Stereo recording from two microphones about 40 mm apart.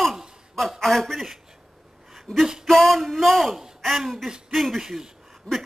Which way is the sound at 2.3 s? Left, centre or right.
Left.